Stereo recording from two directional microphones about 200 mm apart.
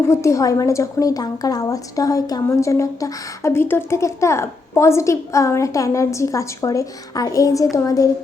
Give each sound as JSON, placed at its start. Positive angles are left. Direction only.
{"t": 0.1, "sound": "a woman's voice", "side_deg": 15}